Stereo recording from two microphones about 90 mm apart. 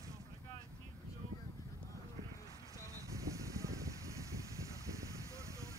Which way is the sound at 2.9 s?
35° right (ahead or behind).